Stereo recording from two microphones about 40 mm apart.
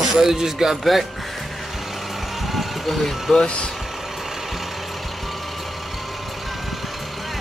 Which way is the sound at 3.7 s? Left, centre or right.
Centre.